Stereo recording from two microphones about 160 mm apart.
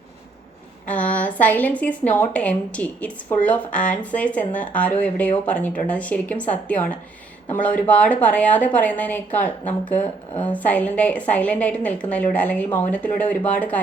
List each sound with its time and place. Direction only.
0.9 s a sound: 10° left (ahead or behind)
1.4 s a woman's voice: 10° left (ahead or behind)
9.9 s speech: 40° left (ahead or behind)
10.4 s a woman's voice: 10° left (ahead or behind)